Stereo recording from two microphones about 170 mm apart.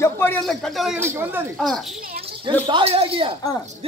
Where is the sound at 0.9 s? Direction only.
15° right (ahead or behind).